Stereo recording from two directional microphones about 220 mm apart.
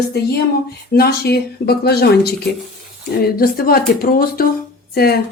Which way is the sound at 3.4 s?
45° left (ahead or behind).